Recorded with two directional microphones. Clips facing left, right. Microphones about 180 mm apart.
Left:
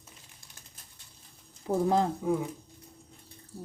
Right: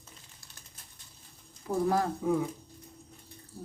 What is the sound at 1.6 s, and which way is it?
Speech, 20° left (ahead or behind).